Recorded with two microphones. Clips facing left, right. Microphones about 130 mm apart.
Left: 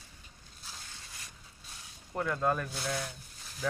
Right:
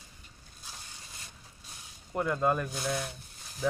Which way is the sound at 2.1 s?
15° right (ahead or behind).